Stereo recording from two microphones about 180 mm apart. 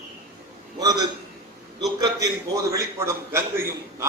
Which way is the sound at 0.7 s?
20° right (ahead or behind).